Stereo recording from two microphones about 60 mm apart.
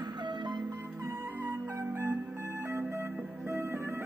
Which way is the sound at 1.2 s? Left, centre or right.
Right.